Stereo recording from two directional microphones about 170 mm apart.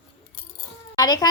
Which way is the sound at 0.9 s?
20° left (ahead or behind).